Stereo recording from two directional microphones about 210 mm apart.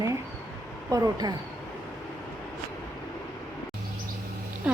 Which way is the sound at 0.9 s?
15° right (ahead or behind).